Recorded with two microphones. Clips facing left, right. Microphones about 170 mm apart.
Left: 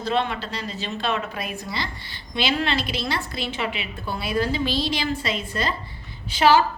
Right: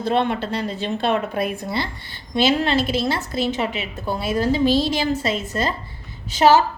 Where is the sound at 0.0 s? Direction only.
55° right (ahead or behind).